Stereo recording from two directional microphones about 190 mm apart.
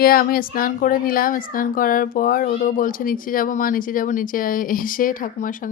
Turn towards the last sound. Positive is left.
turn(degrees=45)  # may be behind; listen again after turning